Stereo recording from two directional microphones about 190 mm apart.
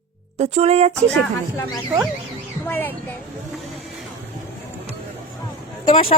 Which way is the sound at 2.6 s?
10° left (ahead or behind).